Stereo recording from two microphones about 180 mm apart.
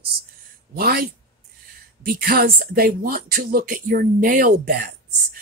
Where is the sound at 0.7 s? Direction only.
60° right (ahead or behind).